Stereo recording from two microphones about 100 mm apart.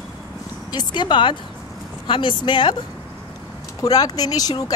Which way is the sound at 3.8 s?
40° left (ahead or behind).